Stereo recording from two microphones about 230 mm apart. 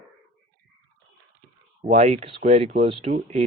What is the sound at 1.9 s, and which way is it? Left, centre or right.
Speech, right.